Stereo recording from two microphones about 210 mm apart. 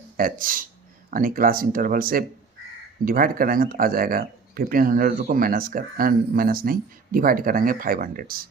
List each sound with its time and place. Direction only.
0.2 s speech: 40° right (ahead or behind)